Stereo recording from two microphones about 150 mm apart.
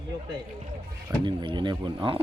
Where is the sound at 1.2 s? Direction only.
30° right (ahead or behind).